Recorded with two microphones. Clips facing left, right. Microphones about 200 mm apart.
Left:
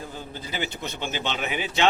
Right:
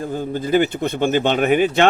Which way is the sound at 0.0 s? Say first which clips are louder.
Right 13 dB; 50° right (ahead or behind).